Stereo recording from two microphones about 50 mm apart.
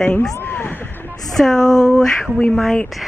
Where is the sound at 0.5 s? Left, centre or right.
Left.